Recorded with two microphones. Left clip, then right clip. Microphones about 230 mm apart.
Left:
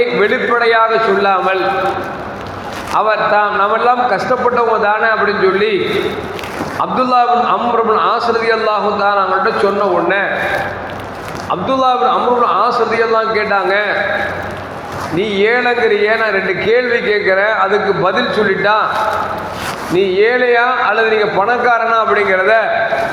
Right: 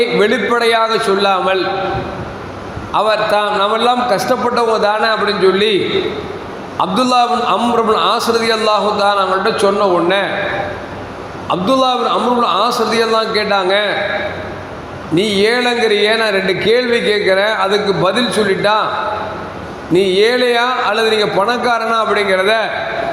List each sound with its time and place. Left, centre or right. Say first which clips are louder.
0.2 s a man's voice: even; right
2.9 s a man's voice: left 1 dB; right
6.7 s a man's voice: even; right
11.4 s a man's voice: even; right
15.2 s a man's voice: even; right
20.0 s a man's voice: even; right